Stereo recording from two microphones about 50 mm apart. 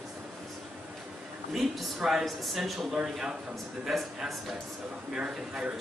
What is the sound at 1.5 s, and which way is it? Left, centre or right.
Speech, centre.